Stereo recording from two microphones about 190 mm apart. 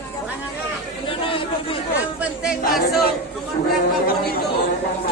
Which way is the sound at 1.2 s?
30° left (ahead or behind).